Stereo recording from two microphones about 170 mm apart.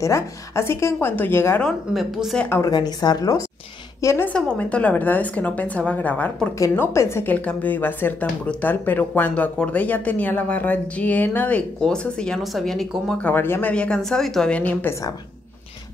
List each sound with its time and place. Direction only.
0.0 s a woman's voice: 15° left (ahead or behind)
1.7 s speech: centre (ahead or behind)
2.5 s a woman's voice: 20° left (ahead or behind); by 13.3 s centre (ahead or behind)
13.3 s a woman's voice: 10° left (ahead or behind)